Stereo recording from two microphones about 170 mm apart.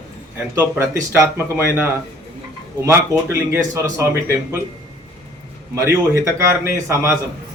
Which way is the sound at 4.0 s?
15° right (ahead or behind).